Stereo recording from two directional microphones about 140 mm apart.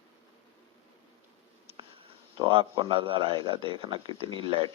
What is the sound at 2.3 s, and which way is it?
Speech, 40° right (ahead or behind).